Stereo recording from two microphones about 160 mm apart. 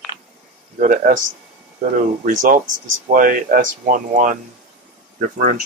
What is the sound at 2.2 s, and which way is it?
Speech, 55° right (ahead or behind).